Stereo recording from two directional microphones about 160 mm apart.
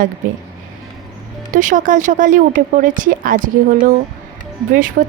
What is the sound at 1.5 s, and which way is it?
A woman's voice, 55° right (ahead or behind).